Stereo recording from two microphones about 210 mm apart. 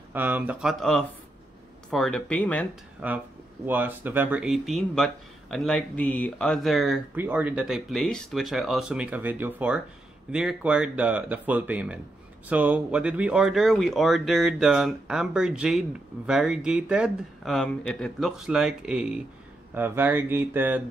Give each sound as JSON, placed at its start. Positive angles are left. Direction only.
{"t": 0.1, "sound": "speech", "side_deg": -10}
{"t": 3.0, "sound": "speech", "side_deg": -5}